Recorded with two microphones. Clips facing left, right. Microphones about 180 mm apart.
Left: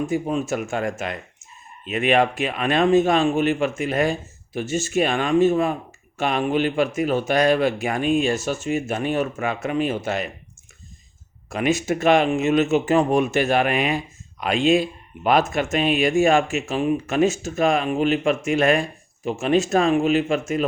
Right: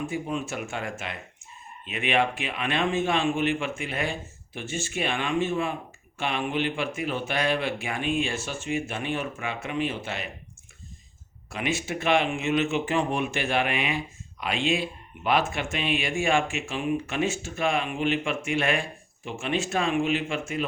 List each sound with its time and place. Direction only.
0.0 s speech: 40° left (ahead or behind)
11.4 s speech: 45° left (ahead or behind)